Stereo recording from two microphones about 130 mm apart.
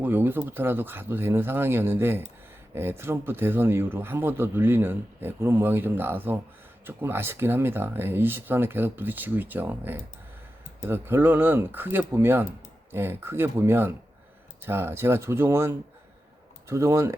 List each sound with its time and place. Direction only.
0.0 s speech: 15° right (ahead or behind)